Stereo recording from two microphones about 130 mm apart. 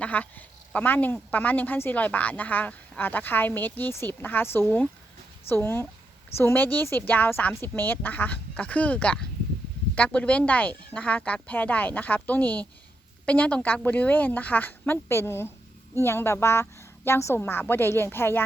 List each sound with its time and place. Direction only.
0.0 s speech: 10° left (ahead or behind)